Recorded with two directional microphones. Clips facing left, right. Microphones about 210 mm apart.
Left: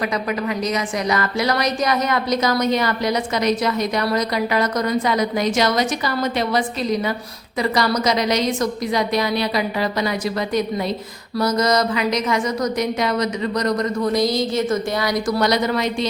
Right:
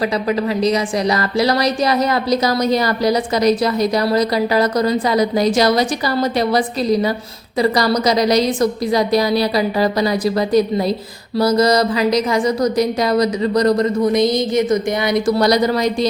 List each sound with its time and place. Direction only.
0.3 s a woman's voice: 30° right (ahead or behind)
15.4 s a woman's voice: 35° right (ahead or behind)